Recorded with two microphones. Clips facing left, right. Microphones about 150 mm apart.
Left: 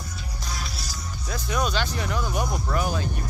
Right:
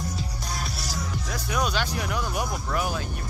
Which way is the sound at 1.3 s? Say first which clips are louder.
Left 2 dB; 10° right (ahead or behind).